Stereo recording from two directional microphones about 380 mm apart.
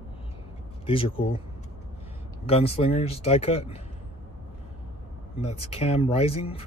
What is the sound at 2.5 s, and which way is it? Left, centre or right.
Speech, centre.